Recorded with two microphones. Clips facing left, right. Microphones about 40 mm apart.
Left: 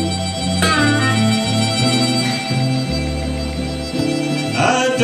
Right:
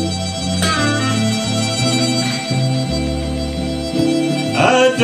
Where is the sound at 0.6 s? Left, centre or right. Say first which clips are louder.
Left 2 dB; centre.